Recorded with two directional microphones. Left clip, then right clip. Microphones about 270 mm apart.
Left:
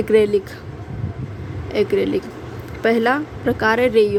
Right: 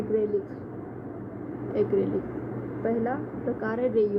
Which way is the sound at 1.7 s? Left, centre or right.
Left.